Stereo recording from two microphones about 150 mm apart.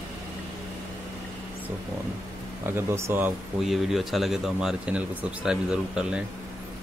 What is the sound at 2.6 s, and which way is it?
Speech, 15° right (ahead or behind).